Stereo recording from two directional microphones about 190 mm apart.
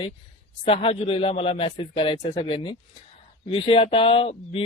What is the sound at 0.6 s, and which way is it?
Speech, 30° left (ahead or behind).